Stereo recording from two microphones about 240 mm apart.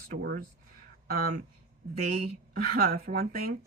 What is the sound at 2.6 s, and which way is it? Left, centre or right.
Speech, right.